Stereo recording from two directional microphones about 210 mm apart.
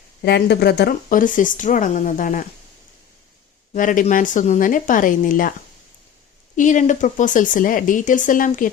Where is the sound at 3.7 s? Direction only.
40° left (ahead or behind).